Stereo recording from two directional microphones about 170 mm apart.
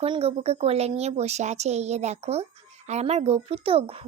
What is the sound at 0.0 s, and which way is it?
A woman's voice, 35° right (ahead or behind).